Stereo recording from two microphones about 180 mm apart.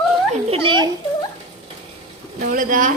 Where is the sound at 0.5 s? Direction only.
25° right (ahead or behind).